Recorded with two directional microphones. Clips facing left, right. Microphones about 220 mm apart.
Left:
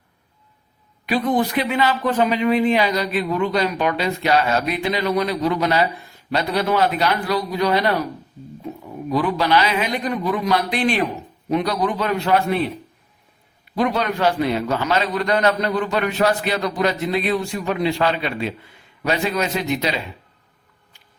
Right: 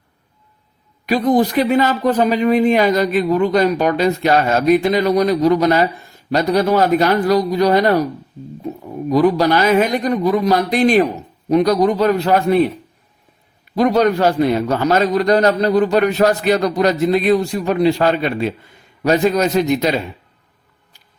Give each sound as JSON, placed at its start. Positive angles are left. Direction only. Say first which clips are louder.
{"t": 1.0, "sound": "a man's voice", "louder": "right 5 dB", "side_deg": -40}
{"t": 13.7, "sound": "a man's voice", "louder": "right 7 dB", "side_deg": -40}